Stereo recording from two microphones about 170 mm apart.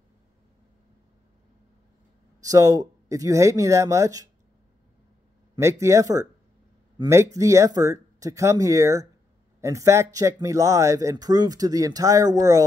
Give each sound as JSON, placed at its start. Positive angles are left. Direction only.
{"t": 2.4, "sound": "speech", "side_deg": -20}
{"t": 5.6, "sound": "speech", "side_deg": -15}